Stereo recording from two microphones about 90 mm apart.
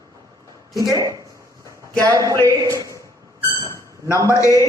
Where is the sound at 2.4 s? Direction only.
40° right (ahead or behind).